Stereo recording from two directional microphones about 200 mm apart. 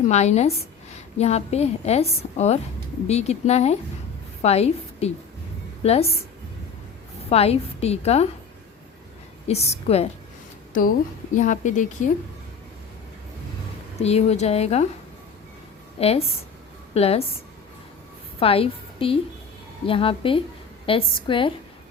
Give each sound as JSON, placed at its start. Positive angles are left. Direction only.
{"t": 0.1, "sound": "a woman's voice", "side_deg": 35}
{"t": 7.3, "sound": "a woman's voice", "side_deg": 30}
{"t": 9.5, "sound": "a woman's voice", "side_deg": 30}
{"t": 11.3, "sound": "a woman's voice", "side_deg": 40}
{"t": 14.0, "sound": "a woman's voice", "side_deg": 30}
{"t": 16.0, "sound": "a woman's voice", "side_deg": 30}
{"t": 18.3, "sound": "a woman's voice", "side_deg": 30}